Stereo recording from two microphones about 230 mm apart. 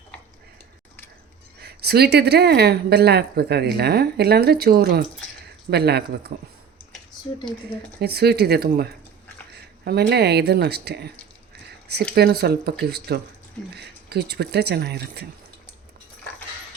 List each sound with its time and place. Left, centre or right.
1.6 s a woman's voice: right
8.0 s a woman's voice: right
12.1 s a woman's voice: right